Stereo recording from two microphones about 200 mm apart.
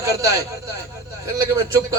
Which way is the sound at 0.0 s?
15° right (ahead or behind).